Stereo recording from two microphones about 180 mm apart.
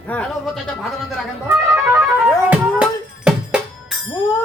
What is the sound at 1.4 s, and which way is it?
Music, 15° right (ahead or behind).